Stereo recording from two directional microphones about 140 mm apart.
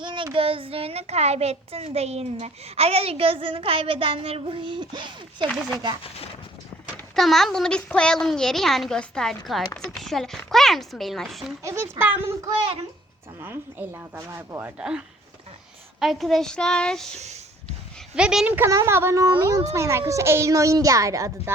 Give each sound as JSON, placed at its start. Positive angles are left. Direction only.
{"t": 0.0, "sound": "child singing", "side_deg": -35}
{"t": 0.3, "sound": "a child's voice", "side_deg": -40}
{"t": 7.2, "sound": "a woman's voice", "side_deg": 0}
{"t": 11.6, "sound": "a woman's voice", "side_deg": -20}
{"t": 13.4, "sound": "a woman's voice", "side_deg": -15}
{"t": 14.8, "sound": "a woman's voice", "side_deg": -5}
{"t": 17.2, "sound": "speech", "side_deg": -50}
{"t": 18.1, "sound": "a woman's voice", "side_deg": -5}